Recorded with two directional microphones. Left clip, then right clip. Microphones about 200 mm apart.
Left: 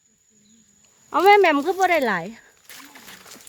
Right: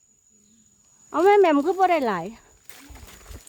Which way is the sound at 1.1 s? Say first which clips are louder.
Left 2 dB; 5° right (ahead or behind).